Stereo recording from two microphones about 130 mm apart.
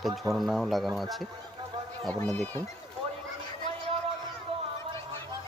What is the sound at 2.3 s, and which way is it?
Speech, 5° left (ahead or behind).